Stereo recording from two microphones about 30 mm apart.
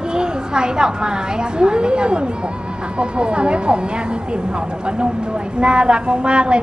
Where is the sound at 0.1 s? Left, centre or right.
Right.